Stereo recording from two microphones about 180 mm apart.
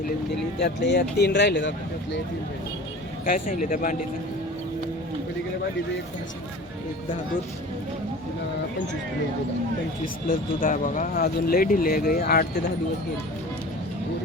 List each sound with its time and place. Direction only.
0.6 s speech: 70° left (ahead or behind)
3.2 s speech: 50° left (ahead or behind)
10.2 s speech: 50° left (ahead or behind)